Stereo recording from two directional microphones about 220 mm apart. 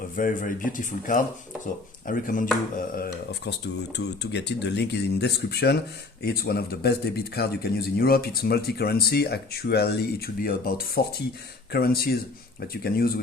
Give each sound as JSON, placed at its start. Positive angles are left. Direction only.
{"t": 0.2, "sound": "a man's voice", "side_deg": 40}